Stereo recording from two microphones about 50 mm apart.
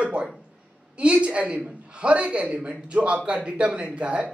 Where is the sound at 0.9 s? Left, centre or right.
Right.